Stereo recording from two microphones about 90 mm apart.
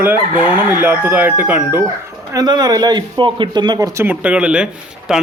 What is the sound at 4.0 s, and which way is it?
Speech, 20° right (ahead or behind).